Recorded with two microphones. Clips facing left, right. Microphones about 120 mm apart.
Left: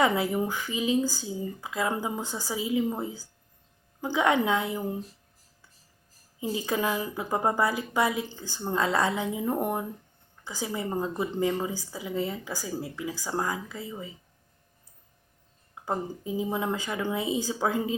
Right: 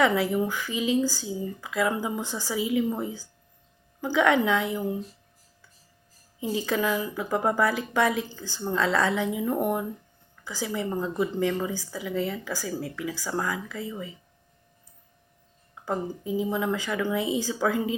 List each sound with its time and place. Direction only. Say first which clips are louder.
0.0 s a woman's voice: right 2 dB; 20° left (ahead or behind)
6.6 s a woman's voice: right 2 dB; 20° left (ahead or behind)
13.4 s speech: right 1 dB; 30° left (ahead or behind)
15.7 s a woman's voice: right 1 dB; 25° left (ahead or behind)